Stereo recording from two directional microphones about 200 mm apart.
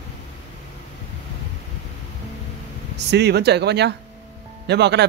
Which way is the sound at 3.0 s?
55° right (ahead or behind).